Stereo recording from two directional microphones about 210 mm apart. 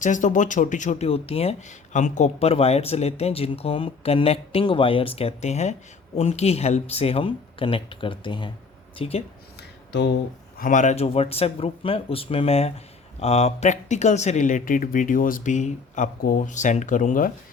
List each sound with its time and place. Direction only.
0.0 s speech: 35° left (ahead or behind)
9.6 s a sound: 55° left (ahead or behind)
10.6 s speech: 35° left (ahead or behind)